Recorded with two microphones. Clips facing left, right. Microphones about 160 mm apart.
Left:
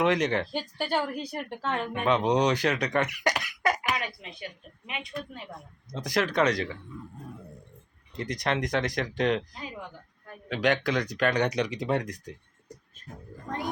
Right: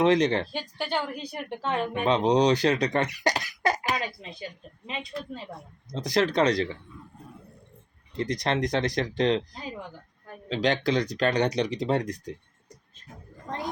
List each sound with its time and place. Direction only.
0.0 s speech: 35° right (ahead or behind)
0.5 s a woman's voice: 10° left (ahead or behind)
1.9 s speech: 30° right (ahead or behind)
8.1 s speech: 35° right (ahead or behind)